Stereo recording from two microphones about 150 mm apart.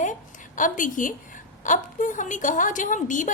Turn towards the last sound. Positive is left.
turn(degrees=55)  # may be behind; listen again after turning